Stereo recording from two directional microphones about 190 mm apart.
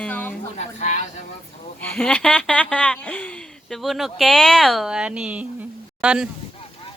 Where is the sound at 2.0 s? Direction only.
5° left (ahead or behind).